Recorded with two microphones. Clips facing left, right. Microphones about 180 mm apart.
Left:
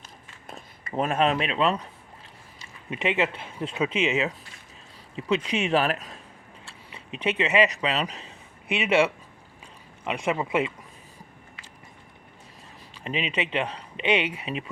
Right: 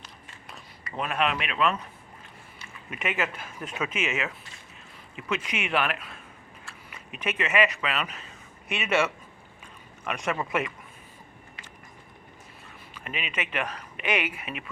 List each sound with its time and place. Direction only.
0.4 s speech: 50° left (ahead or behind); by 1.9 s 35° left (ahead or behind)
2.9 s speech: 25° left (ahead or behind)
10.0 s speech: 20° left (ahead or behind)
13.1 s speech: 25° left (ahead or behind)